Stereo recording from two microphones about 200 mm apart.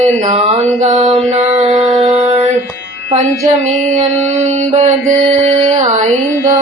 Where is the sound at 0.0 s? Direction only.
30° right (ahead or behind).